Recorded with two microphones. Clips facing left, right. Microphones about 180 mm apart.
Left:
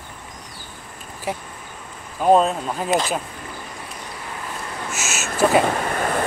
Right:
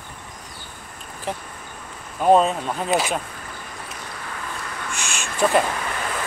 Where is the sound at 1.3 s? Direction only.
10° left (ahead or behind).